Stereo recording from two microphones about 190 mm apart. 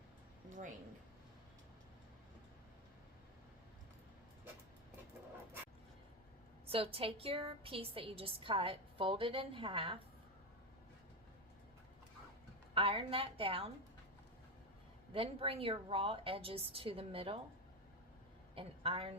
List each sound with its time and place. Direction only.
6.7 s a woman's voice: 30° right (ahead or behind)
12.7 s a woman's voice: 30° right (ahead or behind)
15.1 s a woman's voice: 30° right (ahead or behind)
18.5 s a woman's voice: 30° right (ahead or behind)